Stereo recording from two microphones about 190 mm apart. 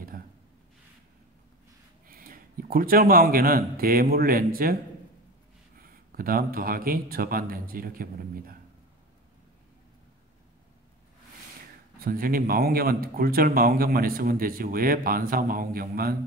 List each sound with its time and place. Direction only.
2.0 s a man's voice: 50° right (ahead or behind)
5.8 s speech: 50° right (ahead or behind)
12.0 s speech: 50° right (ahead or behind)